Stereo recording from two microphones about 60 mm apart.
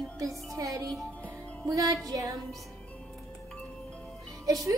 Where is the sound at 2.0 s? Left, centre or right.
Right.